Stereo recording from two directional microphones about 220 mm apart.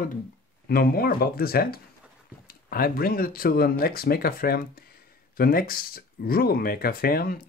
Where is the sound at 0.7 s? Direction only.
45° left (ahead or behind).